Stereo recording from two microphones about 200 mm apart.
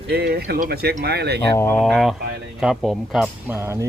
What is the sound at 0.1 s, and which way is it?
Speech, 55° right (ahead or behind).